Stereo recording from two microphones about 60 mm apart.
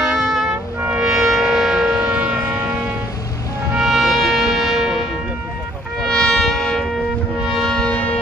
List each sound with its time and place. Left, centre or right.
0.1 s music: centre
2.0 s music: right
3.7 s music: centre
6.0 s music: centre
7.9 s music: left